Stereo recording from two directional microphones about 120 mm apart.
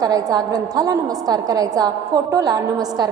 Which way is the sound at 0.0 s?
30° right (ahead or behind).